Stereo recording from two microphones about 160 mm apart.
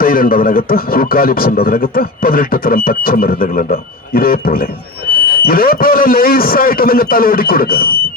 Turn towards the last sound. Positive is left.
turn(degrees=65)  # may be behind; listen again after turning